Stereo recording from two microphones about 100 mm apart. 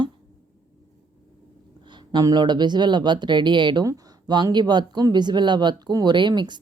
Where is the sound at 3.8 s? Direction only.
40° right (ahead or behind).